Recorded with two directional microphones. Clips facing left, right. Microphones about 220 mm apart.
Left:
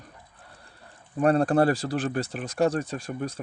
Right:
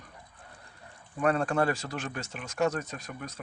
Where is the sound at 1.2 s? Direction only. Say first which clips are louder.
Left 6 dB; 35° left (ahead or behind).